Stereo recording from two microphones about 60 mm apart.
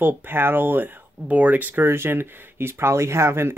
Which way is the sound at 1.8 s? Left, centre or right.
Right.